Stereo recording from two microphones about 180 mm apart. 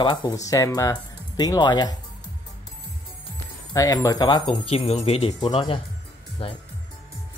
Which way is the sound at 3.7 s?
20° left (ahead or behind).